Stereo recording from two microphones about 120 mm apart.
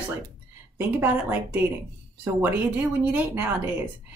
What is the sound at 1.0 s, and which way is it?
A woman's voice, 15° right (ahead or behind).